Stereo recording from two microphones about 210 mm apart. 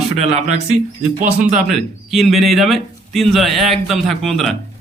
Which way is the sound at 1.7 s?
Centre (ahead or behind).